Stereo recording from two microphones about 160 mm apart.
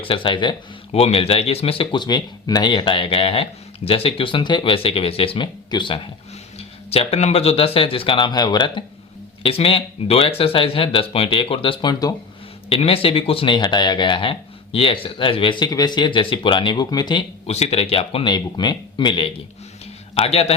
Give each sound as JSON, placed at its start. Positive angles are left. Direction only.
{"t": 0.0, "sound": "speech", "side_deg": 30}
{"t": 12.6, "sound": "speech", "side_deg": 35}
{"t": 17.4, "sound": "speech", "side_deg": 40}